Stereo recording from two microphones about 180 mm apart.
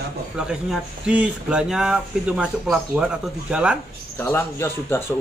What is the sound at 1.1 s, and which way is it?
Speech, 5° right (ahead or behind).